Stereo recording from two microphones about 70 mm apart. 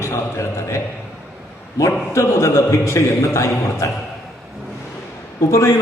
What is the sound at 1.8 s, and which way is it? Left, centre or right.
A man's voice, left.